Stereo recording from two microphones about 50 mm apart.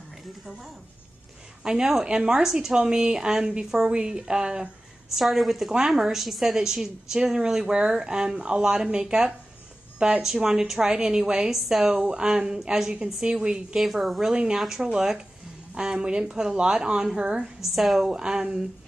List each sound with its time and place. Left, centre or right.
1.6 s a woman's voice: centre
5.1 s a woman's voice: centre
11.5 s a woman's voice: centre
13.7 s a woman's voice: centre
14.3 s a woman's voice: centre
17.7 s a woman's voice: centre
18.0 s a woman's voice: centre